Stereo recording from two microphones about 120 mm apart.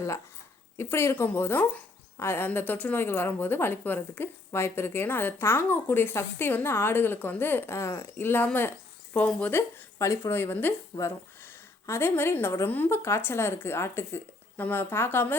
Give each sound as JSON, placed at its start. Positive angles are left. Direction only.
{"t": 0.8, "sound": "a woman's voice", "side_deg": 20}